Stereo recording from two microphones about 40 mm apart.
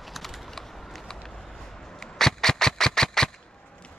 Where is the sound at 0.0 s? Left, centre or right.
Centre.